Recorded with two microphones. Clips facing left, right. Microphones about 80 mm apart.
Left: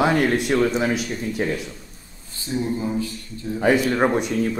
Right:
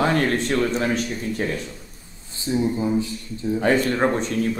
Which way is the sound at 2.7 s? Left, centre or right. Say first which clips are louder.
Right 2 dB; right.